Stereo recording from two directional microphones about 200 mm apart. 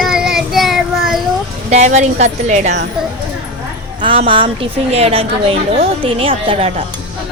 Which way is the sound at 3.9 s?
25° right (ahead or behind).